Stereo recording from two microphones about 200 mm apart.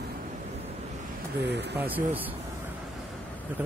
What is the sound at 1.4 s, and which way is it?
Speech, 60° right (ahead or behind).